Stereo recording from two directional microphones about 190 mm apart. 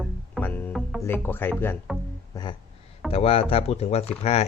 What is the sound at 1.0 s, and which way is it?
Speech, 10° left (ahead or behind).